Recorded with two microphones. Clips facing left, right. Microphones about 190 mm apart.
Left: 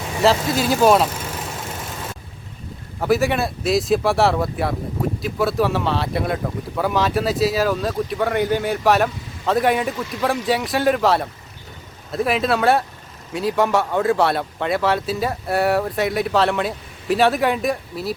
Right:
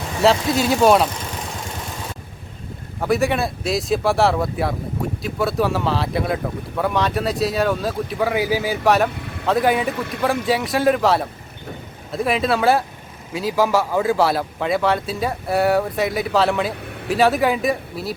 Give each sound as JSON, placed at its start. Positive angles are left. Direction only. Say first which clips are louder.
{"t": 0.2, "sound": "speech", "louder": "right 1 dB", "side_deg": 0}
{"t": 3.0, "sound": "speech", "louder": "left 1 dB", "side_deg": 0}
{"t": 9.1, "sound": "vehicle", "louder": "right 4 dB", "side_deg": -65}
{"t": 9.5, "sound": "speech", "louder": "even", "side_deg": 0}
{"t": 9.9, "sound": "speech", "louder": "right 1 dB", "side_deg": -60}
{"t": 10.4, "sound": "speech", "louder": "right 1 dB", "side_deg": 0}
{"t": 16.8, "sound": "vehicle", "louder": "right 9 dB", "side_deg": -65}
{"t": 17.1, "sound": "speech", "louder": "even", "side_deg": 0}